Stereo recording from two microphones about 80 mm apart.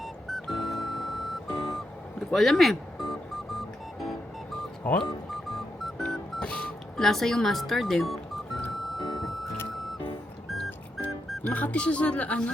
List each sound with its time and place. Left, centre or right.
0.3 s music: centre
6.4 s music: centre
6.9 s speech: centre
8.7 s music: centre
11.4 s speech: centre